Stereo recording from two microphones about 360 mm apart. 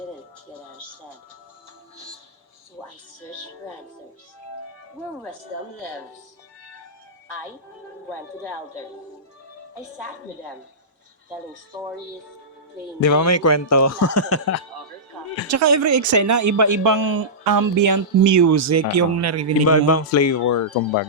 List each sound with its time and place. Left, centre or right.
13.0 s speech: left
15.4 s speech: right
19.6 s speech: left